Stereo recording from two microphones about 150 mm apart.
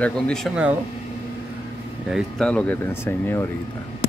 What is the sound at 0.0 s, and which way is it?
Speech, 5° left (ahead or behind).